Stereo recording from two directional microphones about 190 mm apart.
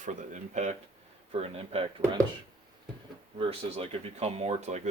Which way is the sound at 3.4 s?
30° right (ahead or behind).